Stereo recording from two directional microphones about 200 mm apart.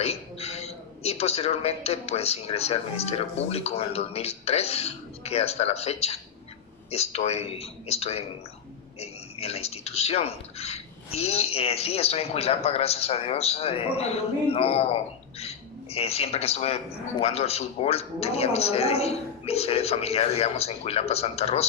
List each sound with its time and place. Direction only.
0.0 s a man's voice: 30° left (ahead or behind)